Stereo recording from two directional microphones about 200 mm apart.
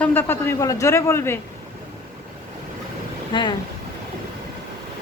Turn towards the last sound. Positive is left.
turn(degrees=20)  # may be behind; listen again after turning